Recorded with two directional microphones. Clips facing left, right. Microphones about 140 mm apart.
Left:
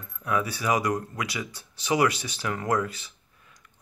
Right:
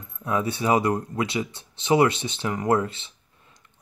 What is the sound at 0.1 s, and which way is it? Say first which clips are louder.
Speech: right 2 dB; 25° right (ahead or behind).